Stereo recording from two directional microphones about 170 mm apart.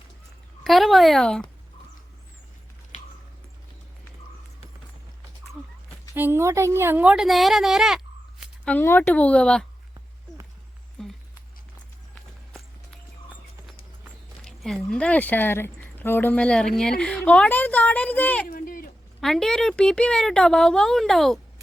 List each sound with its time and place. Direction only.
0.6 s speech: centre (ahead or behind)
2.9 s squish: 45° left (ahead or behind)
6.1 s a woman's voice: 15° right (ahead or behind)
8.7 s speech: 10° left (ahead or behind)
11.0 s a sound: 5° left (ahead or behind)
13.3 s clip-clop: 10° right (ahead or behind)
14.4 s speech: 5° left (ahead or behind)
18.4 s a sound: 55° left (ahead or behind)
19.2 s speech: centre (ahead or behind)